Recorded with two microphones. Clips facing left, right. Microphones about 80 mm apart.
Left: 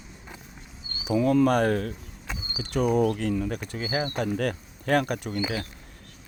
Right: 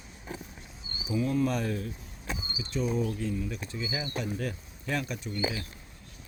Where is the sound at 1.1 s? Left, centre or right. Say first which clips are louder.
Left 7 dB; left.